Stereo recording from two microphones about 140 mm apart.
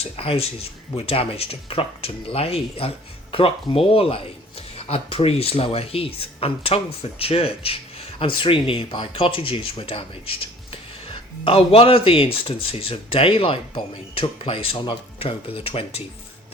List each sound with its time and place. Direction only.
0.0 s speech: 45° left (ahead or behind)